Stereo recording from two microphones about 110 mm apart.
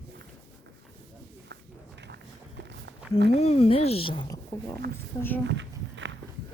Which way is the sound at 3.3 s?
70° left (ahead or behind).